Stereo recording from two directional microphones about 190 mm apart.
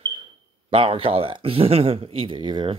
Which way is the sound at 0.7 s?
30° right (ahead or behind).